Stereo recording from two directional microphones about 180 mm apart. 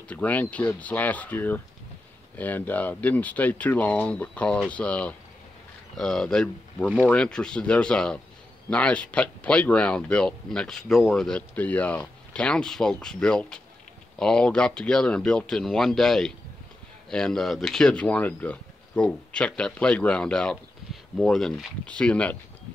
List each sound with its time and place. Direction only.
0.1 s speech: 10° left (ahead or behind)